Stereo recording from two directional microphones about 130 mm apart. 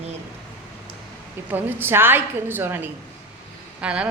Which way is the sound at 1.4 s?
15° right (ahead or behind).